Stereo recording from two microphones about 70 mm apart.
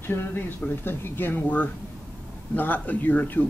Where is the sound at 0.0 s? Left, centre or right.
Left.